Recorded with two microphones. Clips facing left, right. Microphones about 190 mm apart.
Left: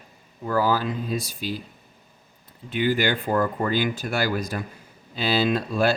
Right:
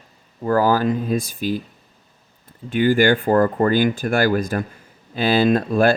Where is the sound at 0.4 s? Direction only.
50° right (ahead or behind).